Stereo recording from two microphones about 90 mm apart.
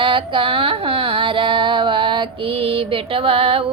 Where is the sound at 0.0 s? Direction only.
75° right (ahead or behind).